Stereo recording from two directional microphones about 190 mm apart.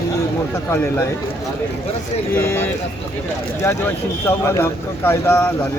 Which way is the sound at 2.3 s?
15° left (ahead or behind).